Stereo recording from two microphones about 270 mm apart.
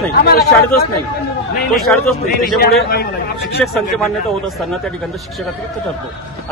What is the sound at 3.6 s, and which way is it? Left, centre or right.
Speech, centre.